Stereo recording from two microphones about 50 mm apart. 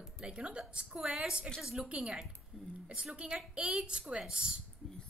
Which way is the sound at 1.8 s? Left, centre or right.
Right.